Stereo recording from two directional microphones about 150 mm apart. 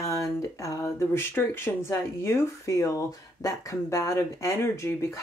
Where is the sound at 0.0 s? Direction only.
20° left (ahead or behind).